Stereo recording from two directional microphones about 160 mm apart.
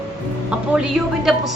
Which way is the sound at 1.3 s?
Centre (ahead or behind).